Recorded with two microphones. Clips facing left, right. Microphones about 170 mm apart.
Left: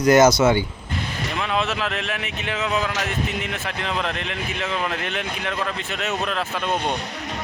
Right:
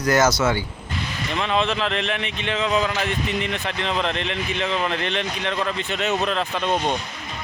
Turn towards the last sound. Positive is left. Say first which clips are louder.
# right 2 dB
turn(degrees=5)  # may be behind; listen again after turning